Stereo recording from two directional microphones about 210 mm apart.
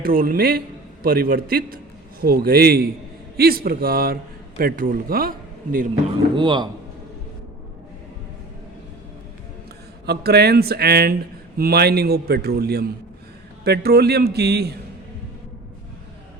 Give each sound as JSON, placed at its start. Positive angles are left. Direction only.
{"t": 0.0, "sound": "speech", "side_deg": -45}
{"t": 6.3, "sound": "a man's voice", "side_deg": -20}
{"t": 10.1, "sound": "speech", "side_deg": -50}